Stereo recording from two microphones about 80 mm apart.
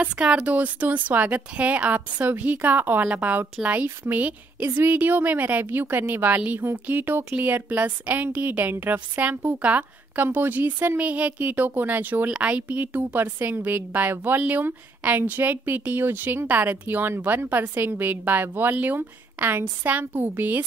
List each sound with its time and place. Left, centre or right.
0.0 s a woman's voice: centre